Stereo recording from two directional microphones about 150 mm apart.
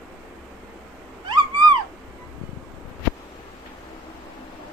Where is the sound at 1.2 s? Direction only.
30° right (ahead or behind).